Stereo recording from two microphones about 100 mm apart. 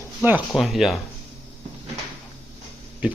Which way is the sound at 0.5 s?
Centre (ahead or behind).